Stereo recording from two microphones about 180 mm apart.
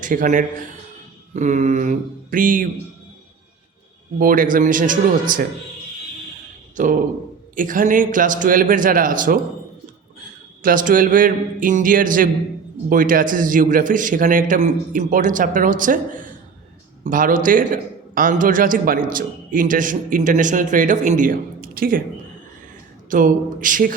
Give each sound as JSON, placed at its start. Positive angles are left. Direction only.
{"t": 0.0, "sound": "a man's voice", "side_deg": -45}
{"t": 4.2, "sound": "a man's voice", "side_deg": -50}
{"t": 7.5, "sound": "a man's voice", "side_deg": -50}
{"t": 10.6, "sound": "a man's voice", "side_deg": -50}
{"t": 23.0, "sound": "a man's voice", "side_deg": -45}